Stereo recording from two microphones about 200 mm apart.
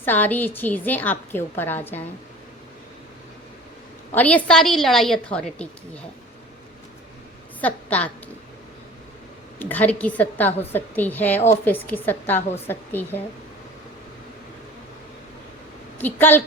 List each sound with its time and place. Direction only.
0.0 s a woman's voice: 10° left (ahead or behind)
4.1 s a woman's voice: 10° left (ahead or behind)
7.6 s a woman's voice: 5° left (ahead or behind)
9.6 s a woman's voice: 10° left (ahead or behind)
16.0 s a woman's voice: 10° left (ahead or behind)